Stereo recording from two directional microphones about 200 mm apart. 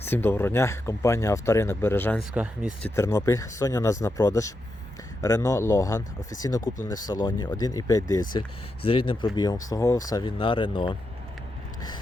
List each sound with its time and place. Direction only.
0.0 s speech: 10° left (ahead or behind)
2.3 s speech: 5° right (ahead or behind)
2.9 s speech: 15° left (ahead or behind)